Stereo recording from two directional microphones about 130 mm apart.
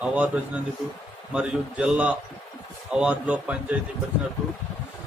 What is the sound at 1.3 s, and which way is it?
A man's voice, 10° right (ahead or behind).